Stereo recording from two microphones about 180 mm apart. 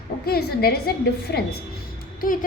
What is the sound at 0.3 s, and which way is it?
A woman's voice, 60° left (ahead or behind).